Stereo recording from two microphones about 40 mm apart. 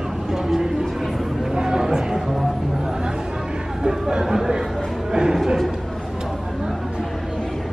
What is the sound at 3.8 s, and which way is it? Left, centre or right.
Speech, centre.